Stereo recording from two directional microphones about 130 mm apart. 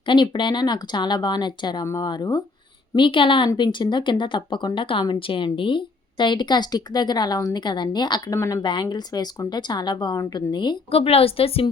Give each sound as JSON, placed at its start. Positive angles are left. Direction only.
{"t": 0.0, "sound": "speech", "side_deg": 40}
{"t": 8.4, "sound": "a woman's voice", "side_deg": 25}
{"t": 8.6, "sound": "speech", "side_deg": 35}